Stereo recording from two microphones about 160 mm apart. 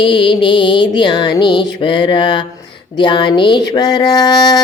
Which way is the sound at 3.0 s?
30° left (ahead or behind).